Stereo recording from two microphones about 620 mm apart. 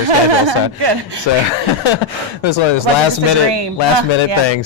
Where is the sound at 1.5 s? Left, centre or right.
Left.